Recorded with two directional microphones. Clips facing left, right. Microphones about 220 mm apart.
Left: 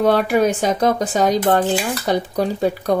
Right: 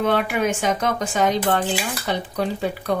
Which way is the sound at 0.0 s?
40° left (ahead or behind).